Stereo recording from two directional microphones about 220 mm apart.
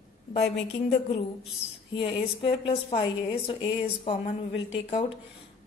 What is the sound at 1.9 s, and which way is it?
A woman's voice, 25° left (ahead or behind).